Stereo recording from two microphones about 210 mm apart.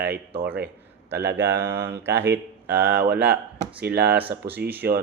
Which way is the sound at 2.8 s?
50° right (ahead or behind).